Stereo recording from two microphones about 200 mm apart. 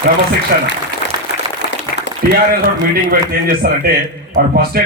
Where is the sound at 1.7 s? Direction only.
60° left (ahead or behind).